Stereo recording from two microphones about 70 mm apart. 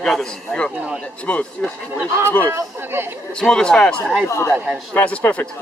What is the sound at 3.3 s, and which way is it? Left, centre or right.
A man's voice, centre.